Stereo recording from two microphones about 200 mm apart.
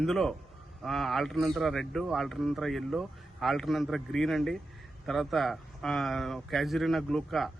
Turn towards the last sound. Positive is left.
turn(degrees=0)  # may be behind; listen again after turning